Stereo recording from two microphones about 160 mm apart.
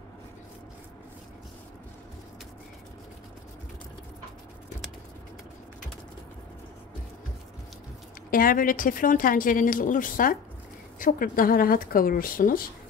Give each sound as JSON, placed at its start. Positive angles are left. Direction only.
{"t": 8.3, "sound": "a woman's voice", "side_deg": 60}